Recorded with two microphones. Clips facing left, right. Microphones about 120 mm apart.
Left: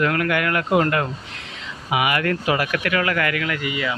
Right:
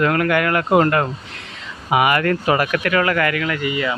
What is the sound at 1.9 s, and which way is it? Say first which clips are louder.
Speech: right 4 dB; 45° right (ahead or behind).